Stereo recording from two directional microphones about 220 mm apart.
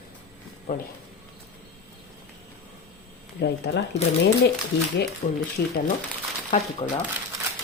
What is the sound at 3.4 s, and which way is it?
Speech, 45° left (ahead or behind).